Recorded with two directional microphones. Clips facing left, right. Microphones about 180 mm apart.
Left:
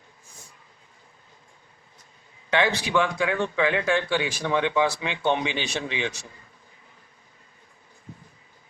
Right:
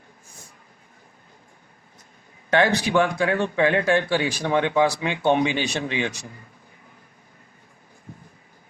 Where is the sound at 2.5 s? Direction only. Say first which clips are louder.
Right 4 dB; 45° right (ahead or behind).